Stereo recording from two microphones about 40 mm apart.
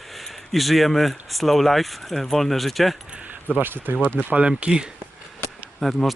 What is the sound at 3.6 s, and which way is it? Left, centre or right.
Speech, right.